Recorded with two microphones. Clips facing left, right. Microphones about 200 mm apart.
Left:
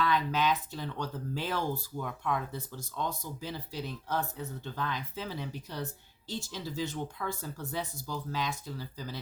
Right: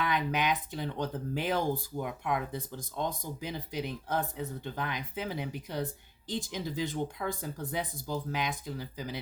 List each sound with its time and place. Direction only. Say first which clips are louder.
0.0 s speech: left 1 dB; 15° right (ahead or behind)